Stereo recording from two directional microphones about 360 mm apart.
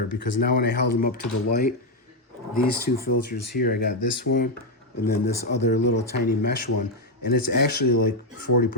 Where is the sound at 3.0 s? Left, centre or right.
Left.